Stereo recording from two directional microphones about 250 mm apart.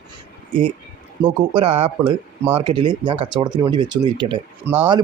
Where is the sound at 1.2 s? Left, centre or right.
Right.